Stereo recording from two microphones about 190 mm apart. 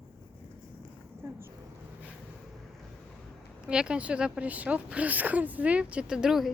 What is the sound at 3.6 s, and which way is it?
Speech, 5° right (ahead or behind).